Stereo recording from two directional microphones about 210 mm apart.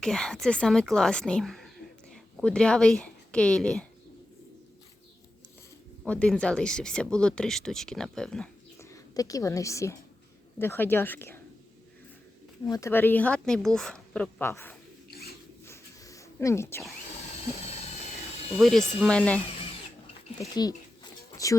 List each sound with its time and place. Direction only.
0.0 s speech: 5° left (ahead or behind)
6.1 s speech: 5° left (ahead or behind)
8.8 s a woman's voice: 15° left (ahead or behind)
12.6 s speech: 15° left (ahead or behind)
15.6 s a sound: 15° left (ahead or behind)
18.5 s speech: centre (ahead or behind)
20.6 s a sound: 20° left (ahead or behind)